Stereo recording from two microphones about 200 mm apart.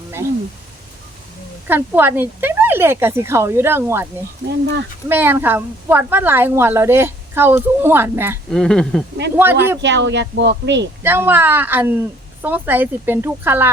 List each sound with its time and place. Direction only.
1.6 s a woman's voice: 10° right (ahead or behind)
4.4 s speech: 60° right (ahead or behind)
5.0 s a woman's voice: 10° right (ahead or behind)
8.4 s speech: 5° left (ahead or behind)
9.3 s a woman's voice: 10° right (ahead or behind)
9.8 s speech: 60° right (ahead or behind)
11.0 s a woman's voice: 10° right (ahead or behind)